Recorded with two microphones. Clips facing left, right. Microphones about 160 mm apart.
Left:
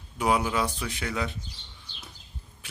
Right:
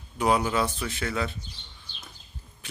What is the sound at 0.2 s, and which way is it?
Speech, 10° left (ahead or behind).